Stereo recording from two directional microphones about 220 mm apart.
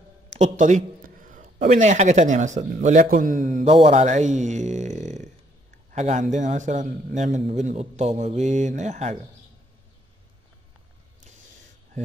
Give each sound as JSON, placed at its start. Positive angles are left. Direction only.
{"t": 0.3, "sound": "speech", "side_deg": -35}